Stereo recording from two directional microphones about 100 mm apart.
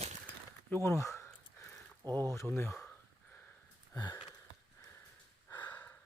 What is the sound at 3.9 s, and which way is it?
Sniff, 40° left (ahead or behind).